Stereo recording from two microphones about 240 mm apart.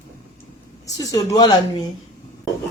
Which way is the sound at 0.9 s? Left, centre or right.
Centre.